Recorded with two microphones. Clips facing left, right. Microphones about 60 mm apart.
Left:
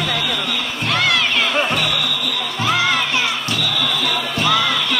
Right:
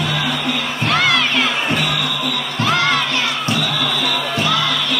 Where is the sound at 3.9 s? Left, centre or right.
Centre.